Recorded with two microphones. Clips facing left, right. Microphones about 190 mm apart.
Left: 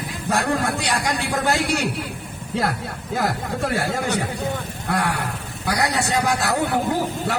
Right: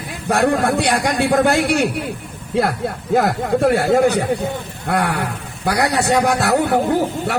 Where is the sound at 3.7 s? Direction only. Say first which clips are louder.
Right 9 dB; 55° right (ahead or behind).